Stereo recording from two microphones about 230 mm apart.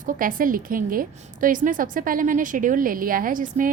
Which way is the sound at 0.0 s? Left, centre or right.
Right.